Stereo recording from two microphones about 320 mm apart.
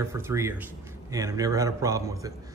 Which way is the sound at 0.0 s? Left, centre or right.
Centre.